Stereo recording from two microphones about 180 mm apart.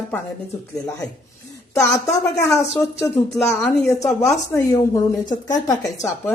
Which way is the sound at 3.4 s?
10° left (ahead or behind).